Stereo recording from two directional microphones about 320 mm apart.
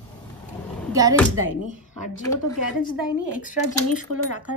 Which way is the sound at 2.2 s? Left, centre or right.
Centre.